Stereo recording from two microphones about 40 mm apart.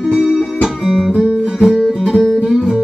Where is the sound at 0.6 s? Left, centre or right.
Centre.